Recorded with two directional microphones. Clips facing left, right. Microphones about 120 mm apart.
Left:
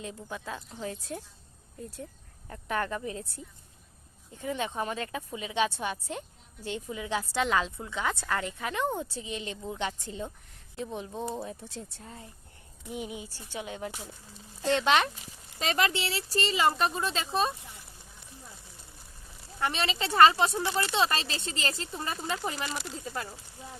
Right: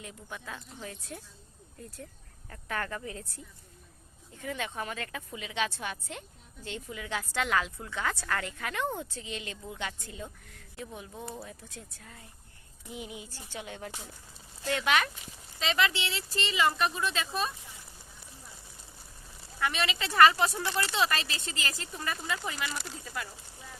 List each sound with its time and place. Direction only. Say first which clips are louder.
0.0 s a woman's voice: left 5 dB; 25° left (ahead or behind)
2.5 s a woman's voice: left 4 dB; 20° left (ahead or behind)
4.4 s a woman's voice: left 4 dB; 20° left (ahead or behind)
13.9 s speech: left 2 dB; centre (ahead or behind)
14.6 s a woman's voice: left 4 dB; 30° left (ahead or behind)
15.5 s speech: left 1 dB; 45° left (ahead or behind)
19.5 s a woman's voice: left 1 dB; 30° left (ahead or behind)
22.7 s speech: left 3 dB; centre (ahead or behind)
23.0 s a woman's voice: left 3 dB; 25° left (ahead or behind)